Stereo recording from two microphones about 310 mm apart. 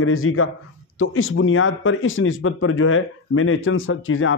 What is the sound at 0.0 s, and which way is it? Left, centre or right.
Speech, left.